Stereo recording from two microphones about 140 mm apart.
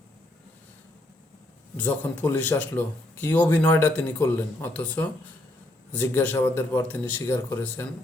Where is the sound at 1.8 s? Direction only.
15° left (ahead or behind).